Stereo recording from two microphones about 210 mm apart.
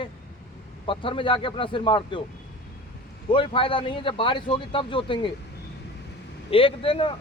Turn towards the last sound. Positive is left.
turn(degrees=25)  # may be behind; listen again after turning